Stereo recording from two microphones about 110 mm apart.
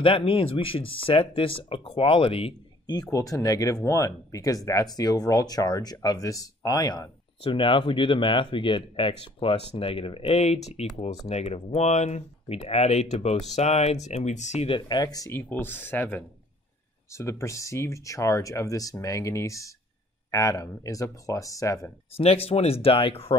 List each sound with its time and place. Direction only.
0.0 s speech: 55° left (ahead or behind)
2.9 s speech: 35° left (ahead or behind)
7.4 s speech: 50° left (ahead or behind); by 14.8 s 80° left
14.9 s speech: 40° left (ahead or behind)
15.3 s speech: 20° left (ahead or behind)
22.1 s speech: 65° left (ahead or behind)